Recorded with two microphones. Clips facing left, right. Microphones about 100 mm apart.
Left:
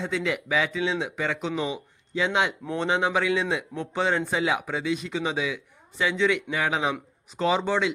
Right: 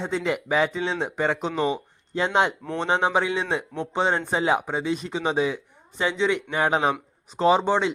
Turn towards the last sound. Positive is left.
turn(degrees=-30)  # may be behind; listen again after turning